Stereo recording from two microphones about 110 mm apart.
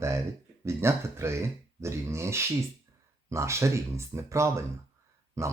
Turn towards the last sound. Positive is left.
turn(degrees=-25)  # may be behind; listen again after turning